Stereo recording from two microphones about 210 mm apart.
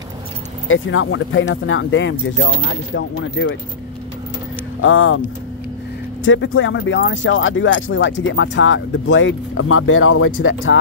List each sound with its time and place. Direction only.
0.7 s speech: 70° left (ahead or behind)
4.8 s speech: 70° left (ahead or behind)
10.4 s speech: 65° left (ahead or behind)